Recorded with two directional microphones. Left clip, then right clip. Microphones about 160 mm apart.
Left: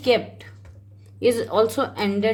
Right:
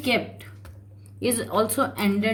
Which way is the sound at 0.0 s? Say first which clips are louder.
Left 4 dB; 35° left (ahead or behind).